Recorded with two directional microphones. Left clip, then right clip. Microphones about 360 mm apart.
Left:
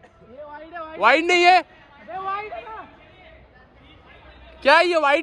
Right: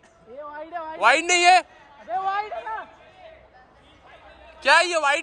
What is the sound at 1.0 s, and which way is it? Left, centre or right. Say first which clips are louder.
Speech: left 2 dB; centre.